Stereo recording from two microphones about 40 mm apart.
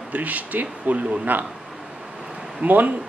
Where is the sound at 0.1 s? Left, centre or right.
Right.